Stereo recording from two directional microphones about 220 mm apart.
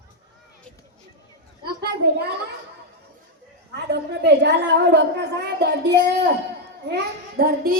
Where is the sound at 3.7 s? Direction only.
50° right (ahead or behind).